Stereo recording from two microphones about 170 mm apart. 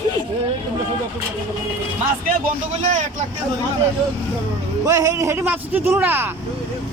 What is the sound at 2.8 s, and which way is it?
Speech, 45° right (ahead or behind).